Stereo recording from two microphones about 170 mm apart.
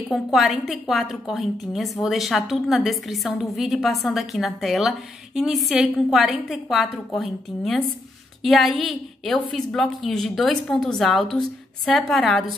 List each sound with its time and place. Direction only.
0.1 s a woman's voice: centre (ahead or behind)